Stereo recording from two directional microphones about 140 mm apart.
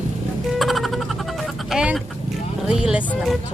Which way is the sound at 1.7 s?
5° right (ahead or behind).